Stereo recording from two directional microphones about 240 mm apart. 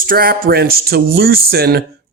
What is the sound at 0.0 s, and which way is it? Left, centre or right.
Speech, right.